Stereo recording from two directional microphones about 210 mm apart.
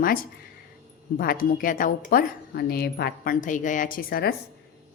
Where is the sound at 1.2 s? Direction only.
40° left (ahead or behind).